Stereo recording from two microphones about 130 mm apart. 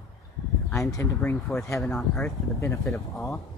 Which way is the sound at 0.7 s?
20° left (ahead or behind).